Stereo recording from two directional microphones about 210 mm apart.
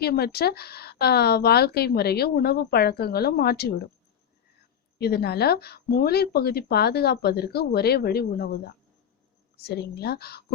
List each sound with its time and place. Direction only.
0.0 s a woman's voice: 50° left (ahead or behind)
4.9 s a woman's voice: 50° left (ahead or behind)